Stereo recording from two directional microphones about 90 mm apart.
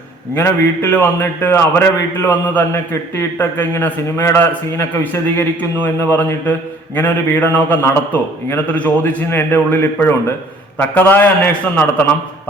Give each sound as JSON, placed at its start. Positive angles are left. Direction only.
{"t": 0.3, "sound": "a man's voice", "side_deg": 25}